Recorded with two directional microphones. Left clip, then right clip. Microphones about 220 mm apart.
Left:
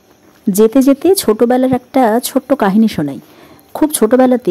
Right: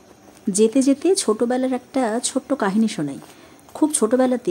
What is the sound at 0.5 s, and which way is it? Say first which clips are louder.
A woman's voice: left 8 dB; 25° left (ahead or behind).